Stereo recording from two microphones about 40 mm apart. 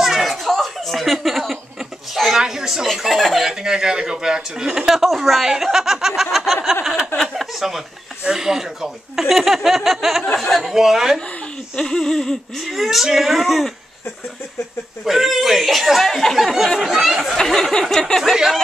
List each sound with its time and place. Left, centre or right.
0.0 s chuckle: centre
3.1 s speech: centre
3.4 s speech: centre
4.9 s speech: centre
6.3 s snicker: centre
7.3 s a sound: centre
8.3 s speech: centre
10.2 s speech: left
10.5 s speech: centre
11.1 s a sound: left
11.8 s speech: centre
15.0 s speech: centre
16.1 s speech: centre
17.4 s speech: centre